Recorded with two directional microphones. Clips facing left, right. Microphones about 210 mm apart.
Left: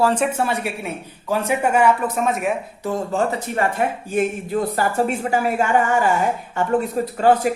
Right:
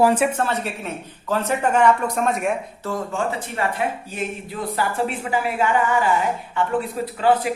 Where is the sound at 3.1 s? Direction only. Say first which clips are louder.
Left 4 dB; 40° left (ahead or behind).